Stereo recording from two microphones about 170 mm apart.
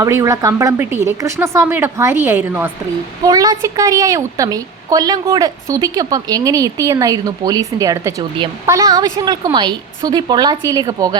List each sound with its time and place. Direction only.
0.0 s a woman's voice: 20° right (ahead or behind)
3.2 s a woman's voice: 20° right (ahead or behind)